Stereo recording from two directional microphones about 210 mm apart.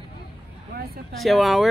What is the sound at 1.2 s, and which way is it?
Speech, centre (ahead or behind).